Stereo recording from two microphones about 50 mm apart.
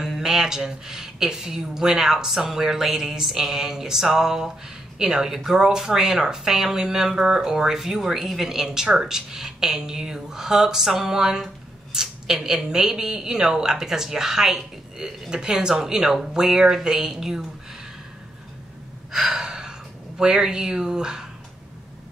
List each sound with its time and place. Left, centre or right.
0.0 s speech: centre
19.1 s gasp: centre
20.2 s speech: centre